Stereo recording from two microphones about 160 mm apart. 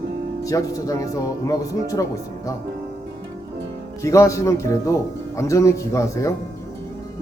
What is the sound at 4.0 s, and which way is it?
Speech, 20° left (ahead or behind).